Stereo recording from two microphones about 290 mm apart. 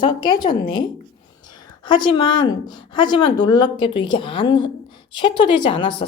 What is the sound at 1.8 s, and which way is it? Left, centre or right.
Speech, centre.